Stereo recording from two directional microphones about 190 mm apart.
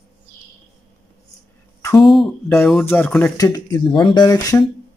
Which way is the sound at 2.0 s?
Centre (ahead or behind).